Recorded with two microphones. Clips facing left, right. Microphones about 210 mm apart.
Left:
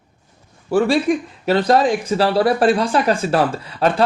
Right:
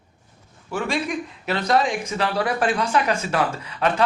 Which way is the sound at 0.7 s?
35° left (ahead or behind).